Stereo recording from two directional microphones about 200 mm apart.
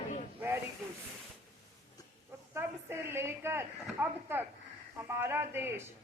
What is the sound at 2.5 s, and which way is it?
Speech, 10° right (ahead or behind).